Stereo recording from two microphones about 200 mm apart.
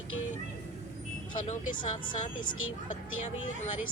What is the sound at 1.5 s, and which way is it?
Speech, 40° left (ahead or behind).